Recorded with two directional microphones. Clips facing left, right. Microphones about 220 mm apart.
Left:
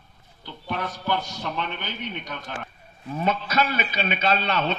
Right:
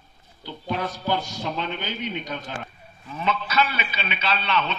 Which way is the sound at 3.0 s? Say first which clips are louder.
Left 2 dB; 45° left (ahead or behind).